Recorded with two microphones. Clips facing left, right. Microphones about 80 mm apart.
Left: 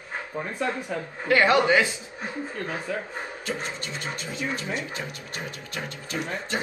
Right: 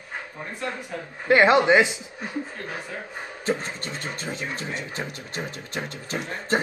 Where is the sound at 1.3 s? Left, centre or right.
Right.